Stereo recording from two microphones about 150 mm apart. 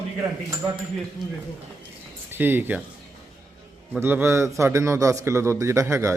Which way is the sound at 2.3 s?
15° right (ahead or behind).